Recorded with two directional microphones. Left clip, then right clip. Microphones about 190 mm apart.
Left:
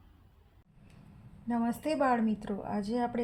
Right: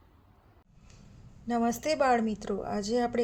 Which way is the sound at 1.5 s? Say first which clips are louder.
Right 4 dB; 45° right (ahead or behind).